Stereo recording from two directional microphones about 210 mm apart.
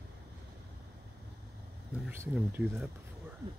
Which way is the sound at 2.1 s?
10° right (ahead or behind).